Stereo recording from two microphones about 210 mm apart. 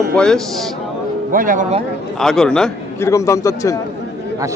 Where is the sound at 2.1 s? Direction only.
Centre (ahead or behind).